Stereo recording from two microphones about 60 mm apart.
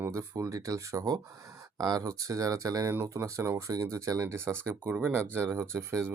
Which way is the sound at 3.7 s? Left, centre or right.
Right.